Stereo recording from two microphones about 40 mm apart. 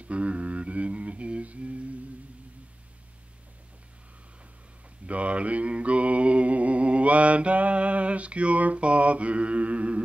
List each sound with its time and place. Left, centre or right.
0.0 s humming: right
5.0 s mantra: right